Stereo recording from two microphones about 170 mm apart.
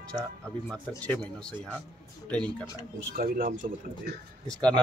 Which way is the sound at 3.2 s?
55° right (ahead or behind).